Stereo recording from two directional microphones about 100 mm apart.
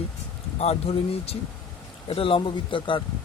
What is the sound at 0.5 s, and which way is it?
Speech, 85° left.